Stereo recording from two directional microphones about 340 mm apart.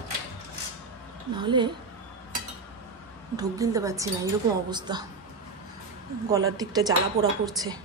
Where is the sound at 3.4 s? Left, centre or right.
Centre.